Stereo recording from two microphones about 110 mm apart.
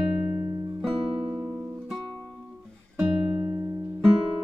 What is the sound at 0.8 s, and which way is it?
Music, 10° right (ahead or behind).